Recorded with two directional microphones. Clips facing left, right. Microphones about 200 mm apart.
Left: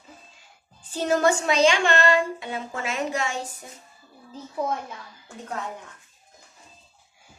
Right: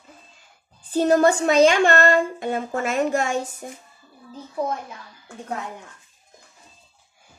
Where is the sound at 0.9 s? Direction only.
45° right (ahead or behind).